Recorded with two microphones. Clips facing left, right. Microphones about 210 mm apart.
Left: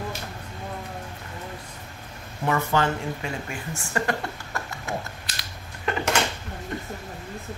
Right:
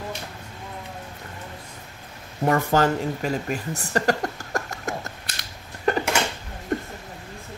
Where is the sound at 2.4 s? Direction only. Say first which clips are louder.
Right 4 dB; 40° right (ahead or behind).